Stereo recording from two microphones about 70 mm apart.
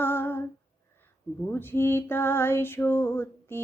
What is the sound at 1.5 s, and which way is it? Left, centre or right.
Female singing, left.